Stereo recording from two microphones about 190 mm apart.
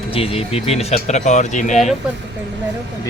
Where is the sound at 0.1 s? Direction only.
30° left (ahead or behind).